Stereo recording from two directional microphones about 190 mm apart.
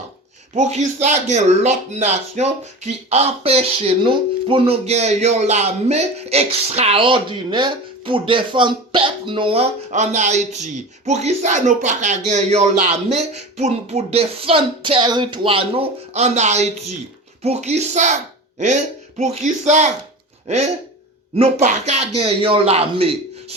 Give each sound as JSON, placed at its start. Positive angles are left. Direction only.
{"t": 0.5, "sound": "speech", "side_deg": -35}
{"t": 19.2, "sound": "speech", "side_deg": -35}
{"t": 21.3, "sound": "speech", "side_deg": -35}